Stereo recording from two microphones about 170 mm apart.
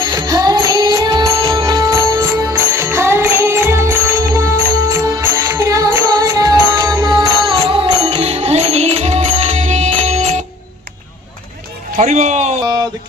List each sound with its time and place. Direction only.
0.0 s music: 25° right (ahead or behind); by 10.4 s 40° right (ahead or behind)
11.9 s a man's voice: 45° right (ahead or behind)
12.6 s a sound: 20° right (ahead or behind)